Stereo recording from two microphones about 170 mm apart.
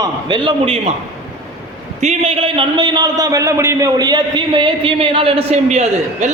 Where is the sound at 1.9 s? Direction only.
40° right (ahead or behind).